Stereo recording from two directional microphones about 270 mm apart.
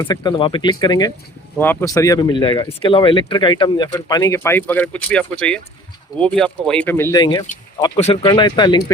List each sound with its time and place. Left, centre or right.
0.0 s speech: centre